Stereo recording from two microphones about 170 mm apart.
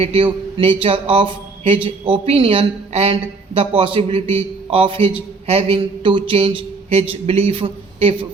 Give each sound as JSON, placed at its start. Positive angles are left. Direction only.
{"t": 0.0, "sound": "a woman's voice", "side_deg": -30}